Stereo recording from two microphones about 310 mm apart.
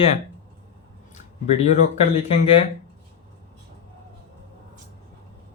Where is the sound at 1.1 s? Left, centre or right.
Left.